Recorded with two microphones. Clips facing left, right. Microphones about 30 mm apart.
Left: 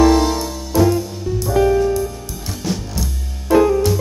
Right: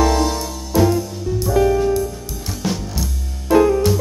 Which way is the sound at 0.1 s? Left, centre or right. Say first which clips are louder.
Left 3 dB; centre.